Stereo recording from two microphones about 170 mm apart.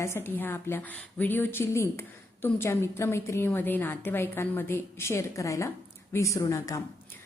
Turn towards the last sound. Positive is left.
turn(degrees=20)  # may be behind; listen again after turning